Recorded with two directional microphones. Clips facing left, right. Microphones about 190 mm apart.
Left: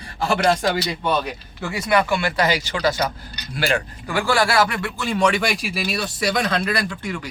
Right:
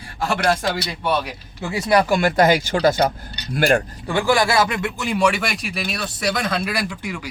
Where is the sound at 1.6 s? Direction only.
30° right (ahead or behind); by 3.8 s 50° right (ahead or behind).